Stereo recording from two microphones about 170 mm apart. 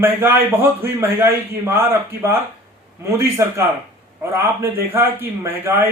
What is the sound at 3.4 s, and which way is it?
A man's voice, 15° right (ahead or behind).